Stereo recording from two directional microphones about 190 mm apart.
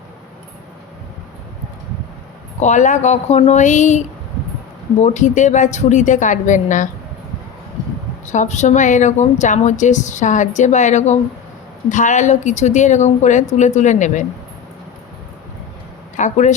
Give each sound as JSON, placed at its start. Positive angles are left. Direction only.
{"t": 2.6, "sound": "a woman's voice", "side_deg": 40}
{"t": 5.0, "sound": "a woman's voice", "side_deg": 40}
{"t": 8.3, "sound": "a woman's voice", "side_deg": 40}
{"t": 16.1, "sound": "a woman's voice", "side_deg": 40}